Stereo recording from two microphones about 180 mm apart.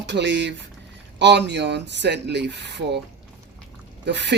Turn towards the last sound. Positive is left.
turn(degrees=-75)  # may be behind; listen again after turning